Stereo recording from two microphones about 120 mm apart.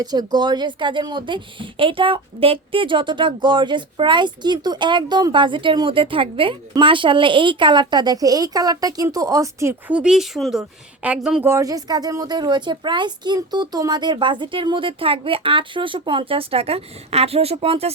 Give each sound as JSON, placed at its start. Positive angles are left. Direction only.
{"t": 0.0, "sound": "a woman's voice", "side_deg": -35}
{"t": 9.9, "sound": "a woman's voice", "side_deg": -5}
{"t": 11.4, "sound": "a woman's voice", "side_deg": -25}